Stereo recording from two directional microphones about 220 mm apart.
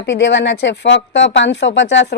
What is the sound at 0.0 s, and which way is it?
A woman's voice, 55° left (ahead or behind).